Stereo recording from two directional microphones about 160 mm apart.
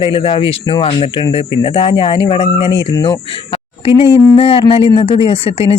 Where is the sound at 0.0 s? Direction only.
35° left (ahead or behind).